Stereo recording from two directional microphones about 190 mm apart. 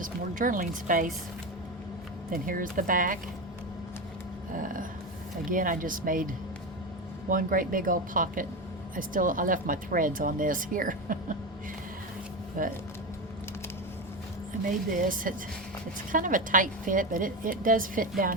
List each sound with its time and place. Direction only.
0.0 s speech: 45° right (ahead or behind)
2.3 s speech: 45° right (ahead or behind)
4.5 s speech: 45° right (ahead or behind)
12.6 s speech: 45° right (ahead or behind)
14.9 s speech: 45° right (ahead or behind)